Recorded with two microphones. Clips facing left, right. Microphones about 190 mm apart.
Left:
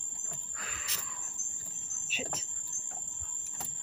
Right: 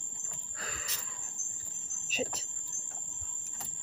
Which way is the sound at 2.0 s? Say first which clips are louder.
Right 5 dB; 35° right (ahead or behind).